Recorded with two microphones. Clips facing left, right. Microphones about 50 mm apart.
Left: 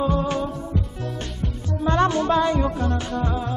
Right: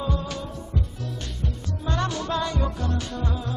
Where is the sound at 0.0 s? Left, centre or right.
Left.